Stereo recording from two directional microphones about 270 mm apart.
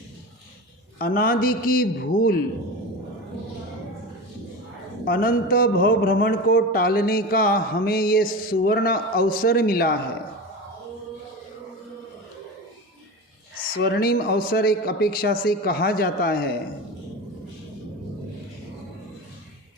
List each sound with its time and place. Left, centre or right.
0.9 s speech: left
5.0 s speech: left
13.7 s speech: left